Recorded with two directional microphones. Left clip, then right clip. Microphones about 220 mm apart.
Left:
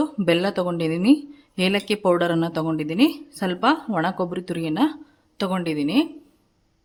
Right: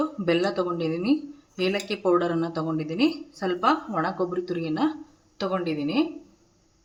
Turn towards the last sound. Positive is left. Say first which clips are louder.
# left 3 dB
turn(degrees=55)  # may be behind; listen again after turning